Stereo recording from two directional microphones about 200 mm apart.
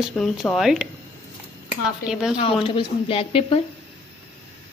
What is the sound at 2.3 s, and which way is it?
Speech, 25° left (ahead or behind).